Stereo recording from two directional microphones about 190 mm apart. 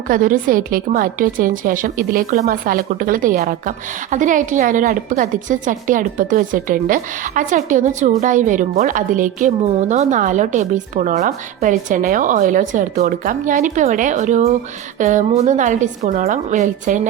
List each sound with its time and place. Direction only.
0.1 s a woman's voice: 45° right (ahead or behind)